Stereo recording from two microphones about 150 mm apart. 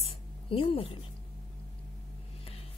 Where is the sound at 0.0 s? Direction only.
40° left (ahead or behind).